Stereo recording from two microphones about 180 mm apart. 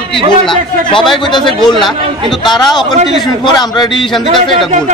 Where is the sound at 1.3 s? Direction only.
25° left (ahead or behind).